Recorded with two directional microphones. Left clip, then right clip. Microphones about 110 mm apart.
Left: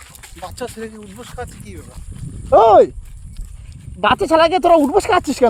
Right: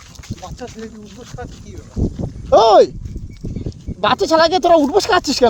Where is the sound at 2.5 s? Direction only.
25° right (ahead or behind).